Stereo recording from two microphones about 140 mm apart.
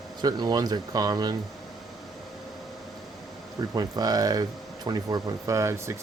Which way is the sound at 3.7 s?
30° right (ahead or behind).